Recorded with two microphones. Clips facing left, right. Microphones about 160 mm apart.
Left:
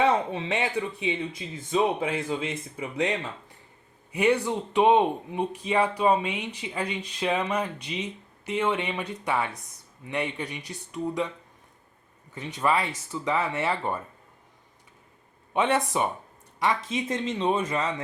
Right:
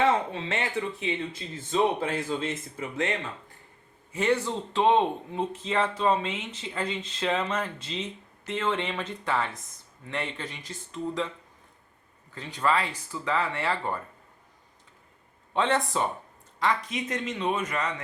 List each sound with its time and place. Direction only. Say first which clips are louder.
0.0 s speech: left 1 dB; 15° left (ahead or behind)
2.3 s speech: even; 10° left (ahead or behind)
12.3 s speech: left 1 dB; 20° left (ahead or behind)
15.5 s speech: left 1 dB; 20° left (ahead or behind)